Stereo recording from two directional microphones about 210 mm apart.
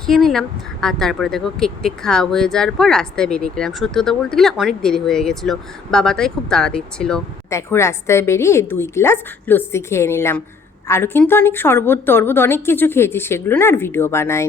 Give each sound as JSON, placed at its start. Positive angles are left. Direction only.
{"t": 0.0, "sound": "a woman's voice", "side_deg": 0}